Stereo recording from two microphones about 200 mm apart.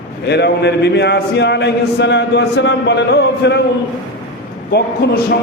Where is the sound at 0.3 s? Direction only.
55° left (ahead or behind).